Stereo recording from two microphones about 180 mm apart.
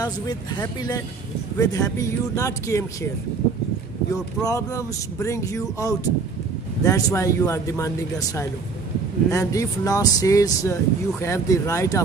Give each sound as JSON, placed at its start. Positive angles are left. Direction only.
{"t": 0.0, "sound": "speech", "side_deg": 20}
{"t": 4.1, "sound": "speech", "side_deg": 20}